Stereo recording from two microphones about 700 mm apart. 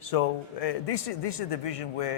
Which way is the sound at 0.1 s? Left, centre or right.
Left.